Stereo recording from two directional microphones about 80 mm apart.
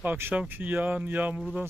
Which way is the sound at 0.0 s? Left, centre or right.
Right.